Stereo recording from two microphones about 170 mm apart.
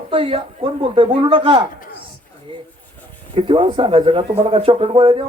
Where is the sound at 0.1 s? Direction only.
35° right (ahead or behind).